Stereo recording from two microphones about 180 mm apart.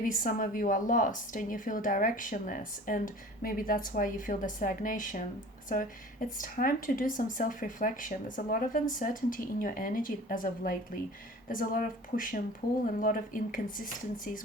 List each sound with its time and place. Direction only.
0.0 s speech: 50° left (ahead or behind)